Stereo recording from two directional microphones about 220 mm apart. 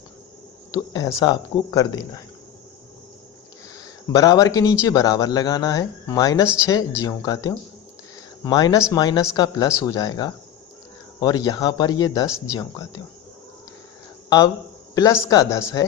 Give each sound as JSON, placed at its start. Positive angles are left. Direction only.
{"t": 0.7, "sound": "speech", "side_deg": 15}
{"t": 4.1, "sound": "speech", "side_deg": 15}
{"t": 14.3, "sound": "a man's voice", "side_deg": 20}